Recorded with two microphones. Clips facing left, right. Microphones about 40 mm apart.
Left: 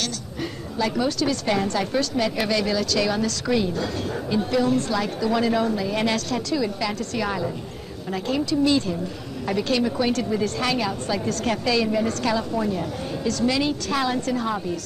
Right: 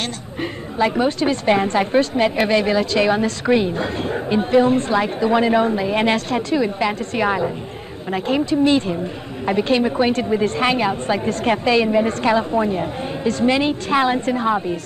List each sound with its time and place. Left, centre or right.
0.0 s a woman's voice: right